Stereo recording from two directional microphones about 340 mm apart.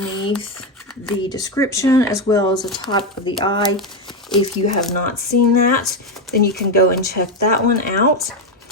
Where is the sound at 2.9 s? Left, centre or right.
Centre.